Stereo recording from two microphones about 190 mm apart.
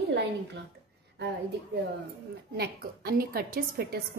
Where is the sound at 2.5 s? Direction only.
55° right (ahead or behind).